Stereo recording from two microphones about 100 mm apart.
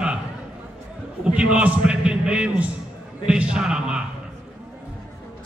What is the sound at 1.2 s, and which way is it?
Speech, 10° right (ahead or behind).